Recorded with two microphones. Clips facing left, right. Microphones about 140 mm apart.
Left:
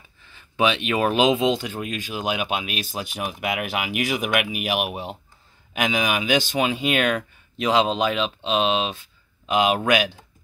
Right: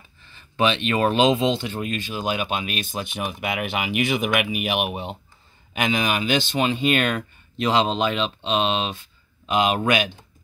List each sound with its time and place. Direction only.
0.6 s speech: 5° left (ahead or behind)